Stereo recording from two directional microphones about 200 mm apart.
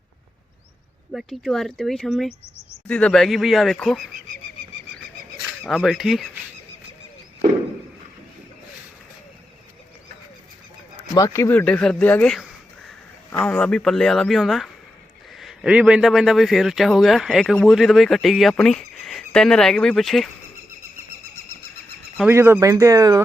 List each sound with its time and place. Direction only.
1.1 s a man's voice: centre (ahead or behind)
5.6 s a man's voice: centre (ahead or behind)
11.1 s a man's voice: 15° left (ahead or behind)
22.3 s speech: 10° right (ahead or behind)